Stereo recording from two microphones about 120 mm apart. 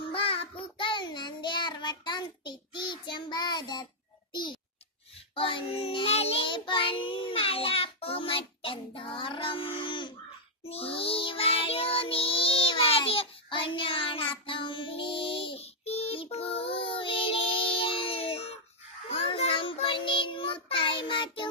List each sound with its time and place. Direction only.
0.0 s child singing: 50° left (ahead or behind)
4.3 s a sound: 40° left (ahead or behind)
5.3 s child singing: 45° left (ahead or behind)
10.7 s music: 50° left (ahead or behind)
19.1 s child singing: 50° left (ahead or behind)